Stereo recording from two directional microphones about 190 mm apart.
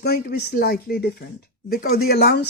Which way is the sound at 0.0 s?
55° left (ahead or behind).